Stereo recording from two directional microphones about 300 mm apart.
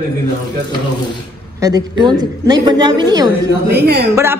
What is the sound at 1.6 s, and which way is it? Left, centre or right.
A woman's voice, centre.